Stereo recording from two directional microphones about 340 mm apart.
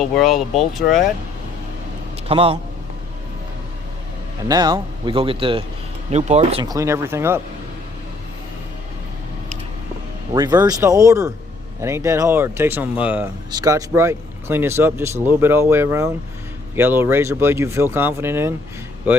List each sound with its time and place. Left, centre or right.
0.0 s speech: centre
2.2 s a man's voice: centre
4.4 s speech: centre
10.3 s speech: centre